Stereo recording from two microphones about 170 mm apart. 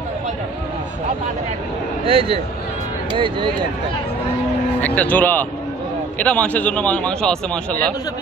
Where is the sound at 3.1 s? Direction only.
30° right (ahead or behind).